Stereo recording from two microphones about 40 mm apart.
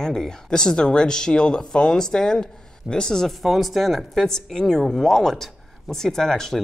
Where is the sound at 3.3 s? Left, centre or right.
Centre.